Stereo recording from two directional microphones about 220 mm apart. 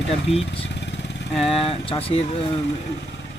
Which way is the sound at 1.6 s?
25° left (ahead or behind).